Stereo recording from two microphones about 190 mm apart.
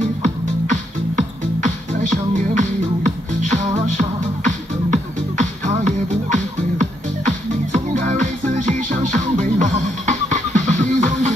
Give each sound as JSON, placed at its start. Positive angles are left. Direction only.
{"t": 0.2, "sound": "music", "side_deg": -40}